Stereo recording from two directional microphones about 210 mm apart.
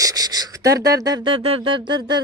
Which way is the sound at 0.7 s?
50° right (ahead or behind).